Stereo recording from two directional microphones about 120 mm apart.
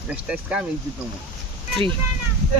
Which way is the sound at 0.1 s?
10° right (ahead or behind).